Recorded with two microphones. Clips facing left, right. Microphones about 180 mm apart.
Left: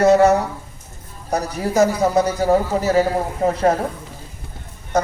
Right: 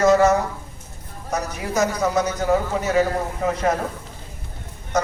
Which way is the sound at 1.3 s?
35° left (ahead or behind).